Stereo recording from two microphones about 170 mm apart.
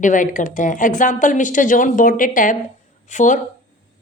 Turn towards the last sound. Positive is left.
turn(degrees=50)  # may be behind; listen again after turning